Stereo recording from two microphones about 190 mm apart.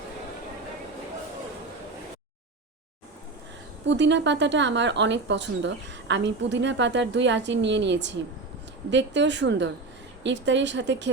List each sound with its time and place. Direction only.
3.8 s speech: 70° right (ahead or behind)